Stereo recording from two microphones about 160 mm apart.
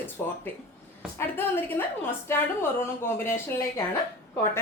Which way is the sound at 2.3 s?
15° left (ahead or behind).